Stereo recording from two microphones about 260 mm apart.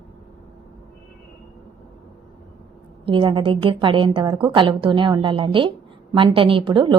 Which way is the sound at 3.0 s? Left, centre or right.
Centre.